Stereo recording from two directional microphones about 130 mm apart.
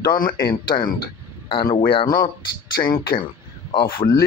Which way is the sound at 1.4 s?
40° left (ahead or behind).